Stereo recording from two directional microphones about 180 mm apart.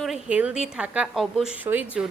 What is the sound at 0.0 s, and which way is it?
A woman's voice, 5° right (ahead or behind).